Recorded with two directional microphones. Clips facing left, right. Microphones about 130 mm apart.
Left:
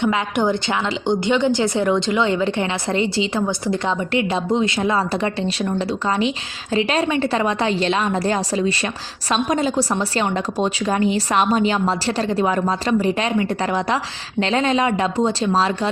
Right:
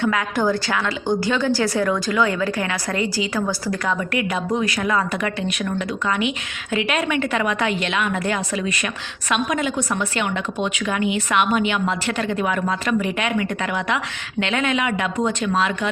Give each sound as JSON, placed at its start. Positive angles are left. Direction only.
{"t": 0.0, "sound": "a woman's voice", "side_deg": 20}